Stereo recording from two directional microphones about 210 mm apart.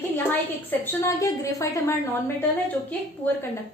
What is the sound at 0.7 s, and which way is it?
A woman's voice, 10° left (ahead or behind).